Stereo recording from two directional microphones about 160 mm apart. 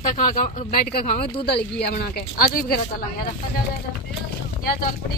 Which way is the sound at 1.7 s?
80° left.